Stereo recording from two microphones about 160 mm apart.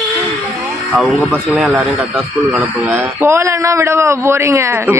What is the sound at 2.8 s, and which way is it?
A man's voice, 15° right (ahead or behind).